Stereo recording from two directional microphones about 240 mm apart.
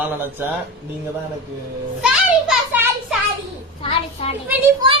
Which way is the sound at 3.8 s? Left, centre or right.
Left.